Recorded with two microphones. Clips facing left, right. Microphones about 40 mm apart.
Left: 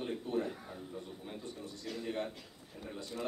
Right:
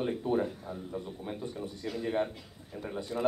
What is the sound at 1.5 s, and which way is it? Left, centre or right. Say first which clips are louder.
Speech: right 6 dB; centre.